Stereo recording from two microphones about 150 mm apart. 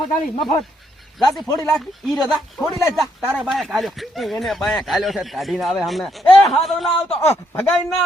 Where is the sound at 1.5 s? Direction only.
20° left (ahead or behind).